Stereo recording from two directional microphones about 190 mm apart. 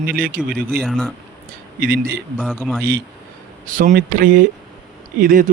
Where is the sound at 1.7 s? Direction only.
50° right (ahead or behind).